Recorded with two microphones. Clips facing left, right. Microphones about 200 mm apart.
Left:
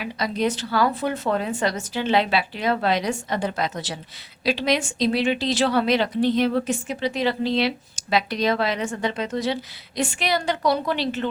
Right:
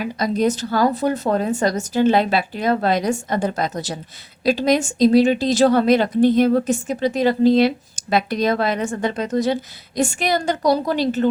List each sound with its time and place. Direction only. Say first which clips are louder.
0.0 s a woman's voice: right 5 dB; 45° right (ahead or behind)